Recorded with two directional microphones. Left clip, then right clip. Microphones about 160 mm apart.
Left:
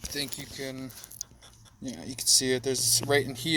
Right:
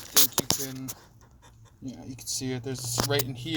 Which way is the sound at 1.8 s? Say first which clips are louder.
Left 5 dB; 45° left (ahead or behind).